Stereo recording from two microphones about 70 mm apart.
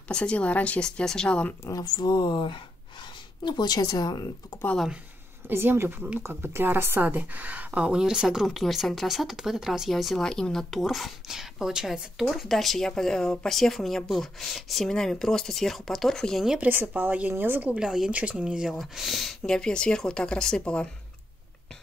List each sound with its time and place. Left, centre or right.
0.1 s speech: centre
1.7 s speech: left
3.4 s speech: left
5.5 s speech: right; by 12.3 s centre
12.3 s speech: centre
16.6 s a woman's voice: right
17.7 s speech: centre